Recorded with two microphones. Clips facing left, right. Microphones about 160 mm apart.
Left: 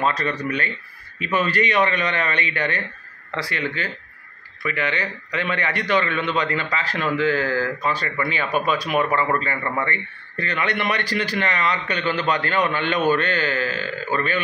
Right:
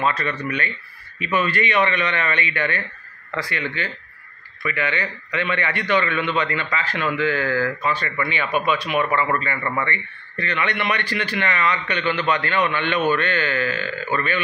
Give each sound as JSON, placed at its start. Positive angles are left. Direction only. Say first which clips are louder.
{"t": 0.0, "sound": "a man's voice", "louder": "even", "side_deg": 40}